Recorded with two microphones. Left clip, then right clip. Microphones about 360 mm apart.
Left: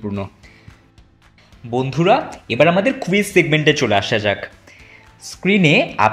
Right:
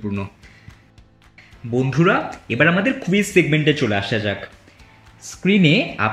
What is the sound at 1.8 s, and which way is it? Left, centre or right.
Speech, centre.